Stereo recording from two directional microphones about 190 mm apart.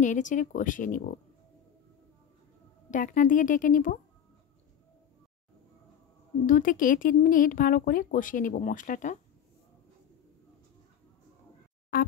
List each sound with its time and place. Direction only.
0.0 s speech: 40° left (ahead or behind)
2.9 s speech: 45° left (ahead or behind)
6.4 s speech: 45° left (ahead or behind)
11.9 s speech: 55° left (ahead or behind)